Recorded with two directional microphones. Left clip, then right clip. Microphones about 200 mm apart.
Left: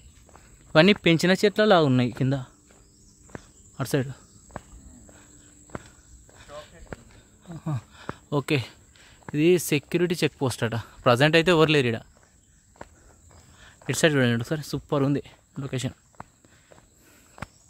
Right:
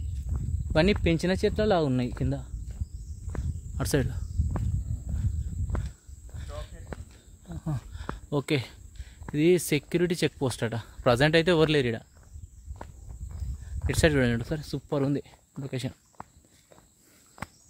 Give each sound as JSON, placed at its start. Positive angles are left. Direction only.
{"t": 0.3, "sound": "snake", "side_deg": 0}
{"t": 1.0, "sound": "speech", "side_deg": 30}
{"t": 3.3, "sound": "walk", "side_deg": 0}
{"t": 6.3, "sound": "snake", "side_deg": 5}
{"t": 7.4, "sound": "speech", "side_deg": 10}
{"t": 12.8, "sound": "walk", "side_deg": 0}
{"t": 13.8, "sound": "speech", "side_deg": 10}
{"t": 16.2, "sound": "walk", "side_deg": 0}
{"t": 17.4, "sound": "walk", "side_deg": 0}